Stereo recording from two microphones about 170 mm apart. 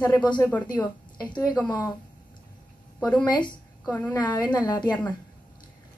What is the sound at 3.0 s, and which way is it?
Speech, 5° left (ahead or behind).